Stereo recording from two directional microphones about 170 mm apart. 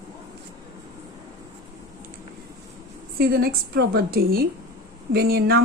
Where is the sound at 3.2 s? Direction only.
60° right (ahead or behind).